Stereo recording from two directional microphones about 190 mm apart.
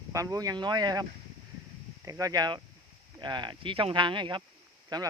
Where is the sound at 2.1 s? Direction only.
20° right (ahead or behind).